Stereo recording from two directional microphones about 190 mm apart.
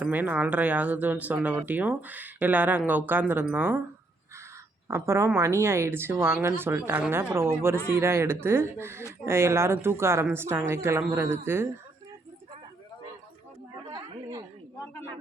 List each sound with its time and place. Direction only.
0.0 s speech: 10° right (ahead or behind)
4.9 s speech: 15° right (ahead or behind)
13.9 s chatter: 20° right (ahead or behind)